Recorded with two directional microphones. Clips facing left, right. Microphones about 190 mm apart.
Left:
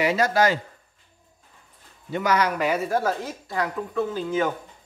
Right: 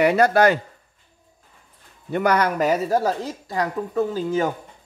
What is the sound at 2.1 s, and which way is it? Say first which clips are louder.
Speech: right 3 dB; 55° right (ahead or behind).